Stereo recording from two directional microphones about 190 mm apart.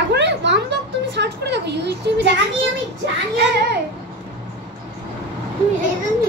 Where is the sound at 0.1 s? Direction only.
65° right (ahead or behind).